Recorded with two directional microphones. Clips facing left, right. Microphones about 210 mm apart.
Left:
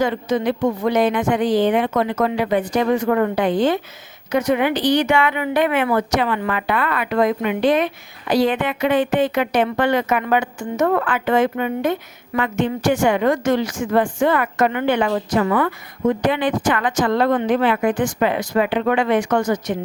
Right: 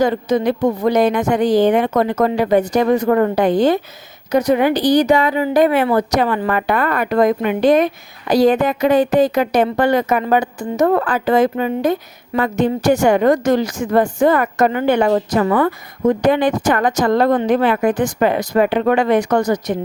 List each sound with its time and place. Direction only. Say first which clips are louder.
0.0 s a woman's voice: right 4 dB; 40° right (ahead or behind)